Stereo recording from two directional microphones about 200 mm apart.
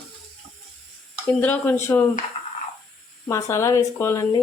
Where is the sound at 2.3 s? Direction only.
30° left (ahead or behind).